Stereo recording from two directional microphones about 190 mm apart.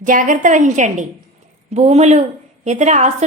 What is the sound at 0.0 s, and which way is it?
A woman's voice, 45° right (ahead or behind).